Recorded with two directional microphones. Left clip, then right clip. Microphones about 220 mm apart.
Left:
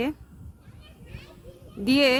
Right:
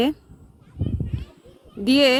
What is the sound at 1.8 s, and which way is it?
Speech, 20° right (ahead or behind).